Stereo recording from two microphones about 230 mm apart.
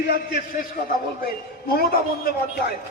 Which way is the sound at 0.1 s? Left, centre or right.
Left.